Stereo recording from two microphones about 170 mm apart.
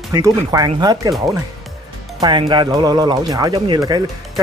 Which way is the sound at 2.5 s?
25° right (ahead or behind).